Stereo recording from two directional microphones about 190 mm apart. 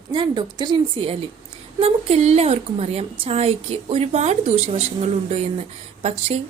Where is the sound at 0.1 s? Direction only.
25° right (ahead or behind).